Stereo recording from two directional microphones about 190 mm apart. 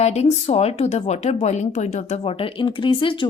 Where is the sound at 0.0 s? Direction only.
35° left (ahead or behind).